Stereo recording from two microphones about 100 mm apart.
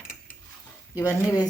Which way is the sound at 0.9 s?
30° left (ahead or behind).